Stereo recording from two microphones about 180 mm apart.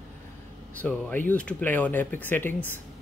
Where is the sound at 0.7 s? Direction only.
5° left (ahead or behind).